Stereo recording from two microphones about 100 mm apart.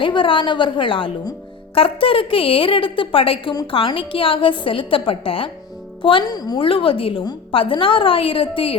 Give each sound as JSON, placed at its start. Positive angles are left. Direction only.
{"t": 0.0, "sound": "a woman's voice", "side_deg": 60}
{"t": 6.2, "sound": "a woman's voice", "side_deg": 40}
{"t": 6.6, "sound": "a woman's voice", "side_deg": 65}